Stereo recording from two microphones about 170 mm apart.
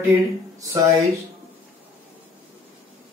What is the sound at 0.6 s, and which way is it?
Speech, 20° right (ahead or behind).